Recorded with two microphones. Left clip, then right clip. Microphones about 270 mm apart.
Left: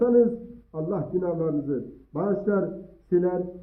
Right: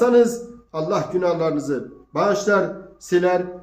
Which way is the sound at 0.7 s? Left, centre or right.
Right.